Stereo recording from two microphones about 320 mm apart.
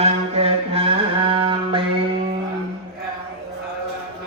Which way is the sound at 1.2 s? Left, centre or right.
Centre.